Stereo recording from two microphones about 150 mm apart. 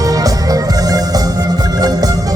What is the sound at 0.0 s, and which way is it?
Music, 25° right (ahead or behind).